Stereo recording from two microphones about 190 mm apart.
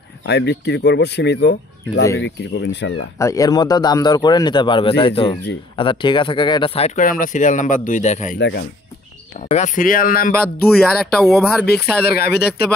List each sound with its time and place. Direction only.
0.2 s speech: 65° left (ahead or behind)
3.2 s speech: 15° left (ahead or behind)
7.0 s speech: 45° left (ahead or behind)
8.4 s speech: 65° left (ahead or behind)
9.5 s speech: 40° left (ahead or behind)
10.4 s speech: 5° left (ahead or behind)
12.1 s speech: 55° left (ahead or behind)